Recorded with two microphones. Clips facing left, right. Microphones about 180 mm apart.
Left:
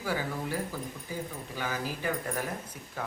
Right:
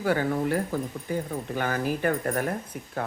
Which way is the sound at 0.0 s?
60° right (ahead or behind).